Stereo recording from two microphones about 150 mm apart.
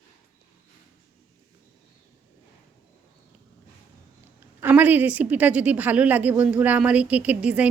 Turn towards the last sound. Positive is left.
turn(degrees=-10)  # may be behind; listen again after turning